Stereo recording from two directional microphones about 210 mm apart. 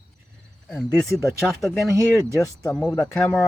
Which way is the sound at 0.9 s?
15° left (ahead or behind).